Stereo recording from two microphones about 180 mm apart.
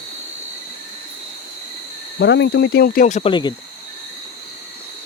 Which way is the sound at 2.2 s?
75° left (ahead or behind).